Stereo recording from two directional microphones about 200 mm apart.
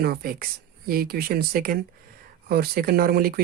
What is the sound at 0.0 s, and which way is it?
Speech, 50° right (ahead or behind).